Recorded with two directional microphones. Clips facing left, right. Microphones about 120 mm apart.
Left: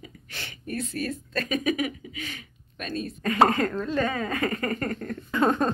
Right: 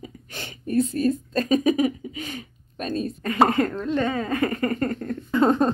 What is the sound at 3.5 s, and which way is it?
Speech, 20° right (ahead or behind).